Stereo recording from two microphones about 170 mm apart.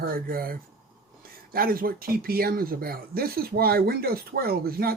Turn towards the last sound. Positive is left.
turn(degrees=-60)  # may be behind; listen again after turning